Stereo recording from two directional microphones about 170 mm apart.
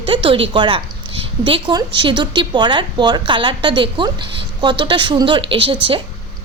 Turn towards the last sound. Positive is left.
turn(degrees=-30)  # may be behind; listen again after turning